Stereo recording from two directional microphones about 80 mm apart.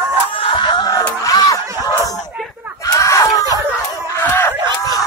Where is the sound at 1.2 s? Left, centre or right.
Left.